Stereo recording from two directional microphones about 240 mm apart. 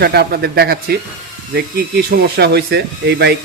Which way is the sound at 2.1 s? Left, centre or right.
Right.